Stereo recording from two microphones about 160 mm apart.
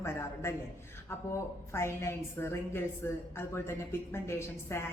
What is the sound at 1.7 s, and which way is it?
A woman's voice, 15° left (ahead or behind).